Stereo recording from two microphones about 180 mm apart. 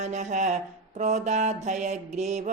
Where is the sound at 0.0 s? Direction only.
40° right (ahead or behind).